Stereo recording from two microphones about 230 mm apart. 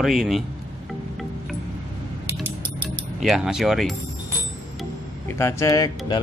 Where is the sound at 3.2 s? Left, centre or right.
Centre.